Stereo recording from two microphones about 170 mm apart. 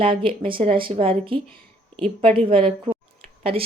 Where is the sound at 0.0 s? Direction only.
30° right (ahead or behind).